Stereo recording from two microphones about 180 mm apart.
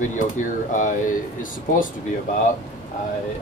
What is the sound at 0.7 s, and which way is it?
Speech, 45° left (ahead or behind).